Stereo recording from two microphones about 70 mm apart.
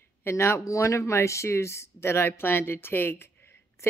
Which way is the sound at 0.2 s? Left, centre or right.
Left.